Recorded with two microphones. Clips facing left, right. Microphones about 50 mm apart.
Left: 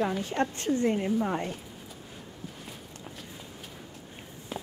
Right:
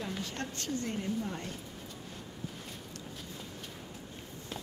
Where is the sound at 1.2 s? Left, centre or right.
Left.